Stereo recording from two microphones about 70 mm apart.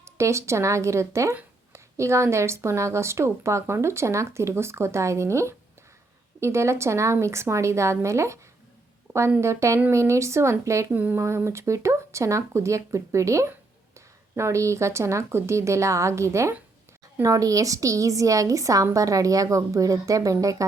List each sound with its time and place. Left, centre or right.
0.0 s speech: right
9.4 s speech: right
10.9 s speech: right
11.2 s speech: right
17.2 s speech: right